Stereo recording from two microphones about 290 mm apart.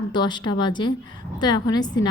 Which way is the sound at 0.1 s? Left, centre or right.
Centre.